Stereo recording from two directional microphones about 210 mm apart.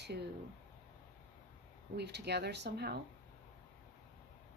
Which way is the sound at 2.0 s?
50° right (ahead or behind).